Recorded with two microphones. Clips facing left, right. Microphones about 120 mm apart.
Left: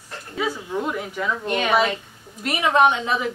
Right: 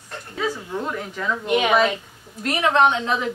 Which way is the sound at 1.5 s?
15° right (ahead or behind).